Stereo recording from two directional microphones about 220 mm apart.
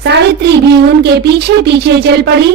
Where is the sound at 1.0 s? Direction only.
50° right (ahead or behind).